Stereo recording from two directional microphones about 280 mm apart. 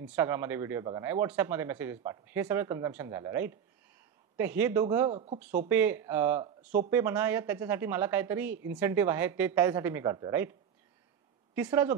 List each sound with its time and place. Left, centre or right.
0.0 s speech: centre
5.1 s speech: right
5.7 s speech: centre
11.5 s speech: centre